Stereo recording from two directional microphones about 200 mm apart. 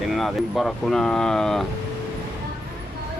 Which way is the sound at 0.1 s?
Centre (ahead or behind).